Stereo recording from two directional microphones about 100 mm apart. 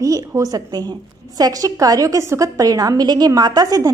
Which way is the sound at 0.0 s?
35° right (ahead or behind).